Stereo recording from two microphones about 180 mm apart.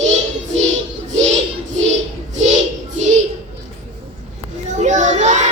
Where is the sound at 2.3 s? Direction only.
40° right (ahead or behind).